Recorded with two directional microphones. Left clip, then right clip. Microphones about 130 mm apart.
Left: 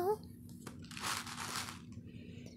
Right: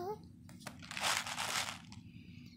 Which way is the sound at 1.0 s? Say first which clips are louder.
Right 5 dB; 90° right.